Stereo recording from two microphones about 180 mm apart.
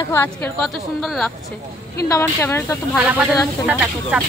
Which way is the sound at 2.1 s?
15° left (ahead or behind).